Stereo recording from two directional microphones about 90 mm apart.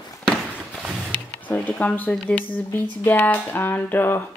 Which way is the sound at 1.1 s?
15° left (ahead or behind).